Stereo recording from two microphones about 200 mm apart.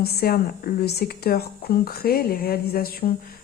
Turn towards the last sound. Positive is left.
turn(degrees=50)  # may be behind; listen again after turning